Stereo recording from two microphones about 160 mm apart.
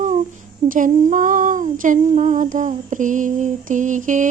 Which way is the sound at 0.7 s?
55° right (ahead or behind).